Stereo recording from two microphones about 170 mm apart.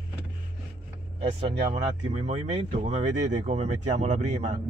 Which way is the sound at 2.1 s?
40° right (ahead or behind).